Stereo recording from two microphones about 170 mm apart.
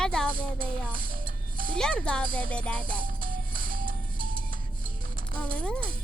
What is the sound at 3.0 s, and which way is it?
Music, 55° right (ahead or behind).